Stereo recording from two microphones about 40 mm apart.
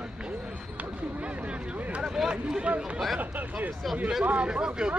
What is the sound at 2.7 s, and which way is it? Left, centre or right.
Speech, right.